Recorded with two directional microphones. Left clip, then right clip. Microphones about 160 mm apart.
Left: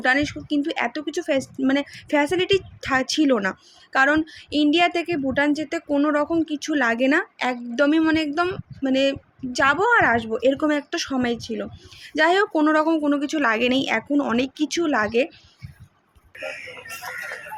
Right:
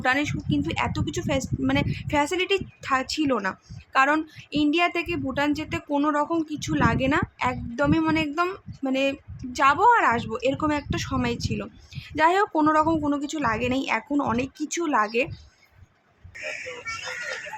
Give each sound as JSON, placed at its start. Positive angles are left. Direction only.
{"t": 0.0, "sound": "speech", "side_deg": 10}